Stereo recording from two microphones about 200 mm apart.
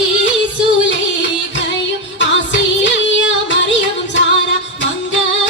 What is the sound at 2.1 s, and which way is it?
Music, 65° left (ahead or behind).